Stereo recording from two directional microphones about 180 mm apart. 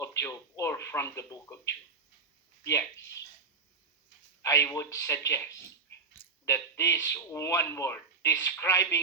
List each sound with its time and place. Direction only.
0.0 s speech: 15° left (ahead or behind)
4.4 s speech: 15° left (ahead or behind)